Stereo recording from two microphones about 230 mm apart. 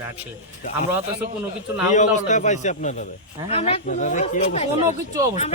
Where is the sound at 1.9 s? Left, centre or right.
Left.